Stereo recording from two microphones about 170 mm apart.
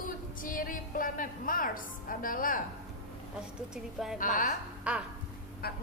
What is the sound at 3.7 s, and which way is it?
Speech, centre (ahead or behind).